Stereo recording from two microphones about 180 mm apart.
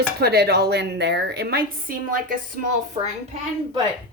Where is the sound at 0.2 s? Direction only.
65° right (ahead or behind); by 3.1 s 50° right (ahead or behind).